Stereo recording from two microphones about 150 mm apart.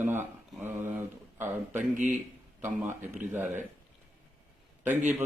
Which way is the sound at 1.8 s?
55° right (ahead or behind).